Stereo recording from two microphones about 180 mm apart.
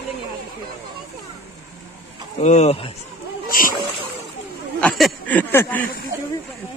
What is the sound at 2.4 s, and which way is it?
Speech, 35° left (ahead or behind).